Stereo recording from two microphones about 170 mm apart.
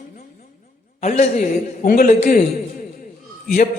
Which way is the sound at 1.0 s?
45° left (ahead or behind).